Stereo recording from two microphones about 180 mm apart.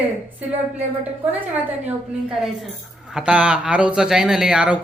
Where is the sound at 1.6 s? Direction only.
5° right (ahead or behind).